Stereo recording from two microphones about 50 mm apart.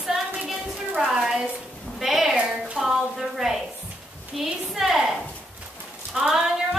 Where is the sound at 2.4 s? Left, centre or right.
Centre.